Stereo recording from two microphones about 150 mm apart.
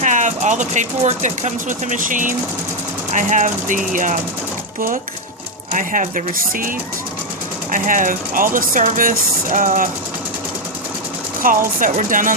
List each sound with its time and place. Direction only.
0.0 s speech: 55° right (ahead or behind)
5.7 s speech: 60° right (ahead or behind)
11.4 s speech: 65° right (ahead or behind)